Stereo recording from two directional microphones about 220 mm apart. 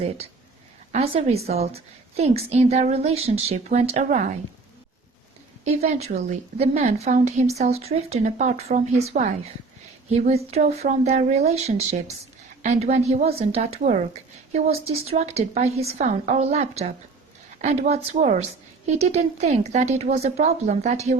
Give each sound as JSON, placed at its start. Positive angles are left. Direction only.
{"t": 0.9, "sound": "a woman's voice", "side_deg": -25}
{"t": 5.6, "sound": "a woman's voice", "side_deg": -30}